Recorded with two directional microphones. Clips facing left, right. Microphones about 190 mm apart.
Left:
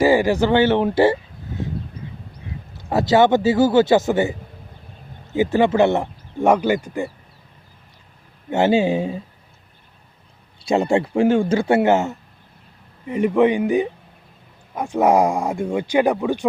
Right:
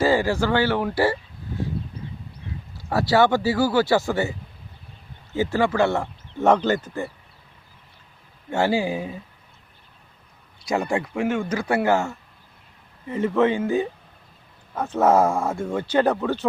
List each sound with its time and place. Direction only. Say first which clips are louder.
0.0 s speech: left 4 dB; 15° left (ahead or behind)
2.7 s a man's voice: left 3 dB; 20° left (ahead or behind)
8.4 s a man's voice: left 5 dB; 20° left (ahead or behind)
10.6 s a man's voice: left 6 dB; 25° left (ahead or behind)